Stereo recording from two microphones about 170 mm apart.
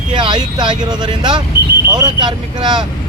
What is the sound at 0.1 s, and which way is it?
Speech, 30° right (ahead or behind).